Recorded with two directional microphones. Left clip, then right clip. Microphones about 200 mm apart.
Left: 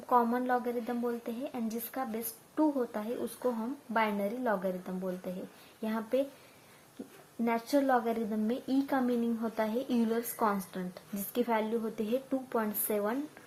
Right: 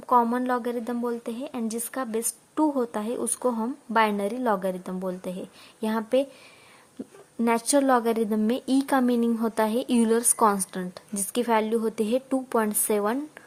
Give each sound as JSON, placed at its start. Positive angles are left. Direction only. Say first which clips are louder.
{"t": 0.1, "sound": "a woman's voice", "louder": "right 6 dB", "side_deg": -35}
{"t": 7.4, "sound": "speech", "louder": "right 7 dB", "side_deg": -50}